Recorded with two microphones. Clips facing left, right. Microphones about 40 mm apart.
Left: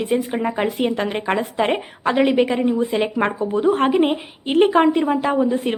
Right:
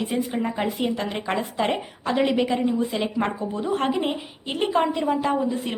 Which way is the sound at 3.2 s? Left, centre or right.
Left.